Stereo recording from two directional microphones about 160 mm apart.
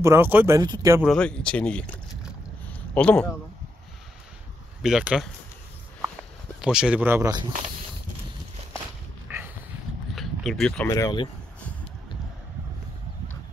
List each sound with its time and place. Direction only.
0.0 s speech: 15° right (ahead or behind)
1.0 s speech: 5° left (ahead or behind)
2.6 s a sound: 10° left (ahead or behind)
4.8 s speech: 5° right (ahead or behind)
6.6 s speech: 5° right (ahead or behind)
9.3 s dog: 10° right (ahead or behind)
10.1 s a sound: centre (ahead or behind)
10.9 s speech: 25° left (ahead or behind)